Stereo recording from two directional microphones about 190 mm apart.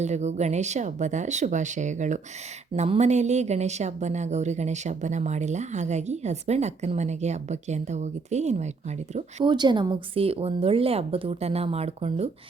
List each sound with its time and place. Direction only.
0.0 s a woman's voice: 35° right (ahead or behind)
9.4 s a woman's voice: 25° right (ahead or behind)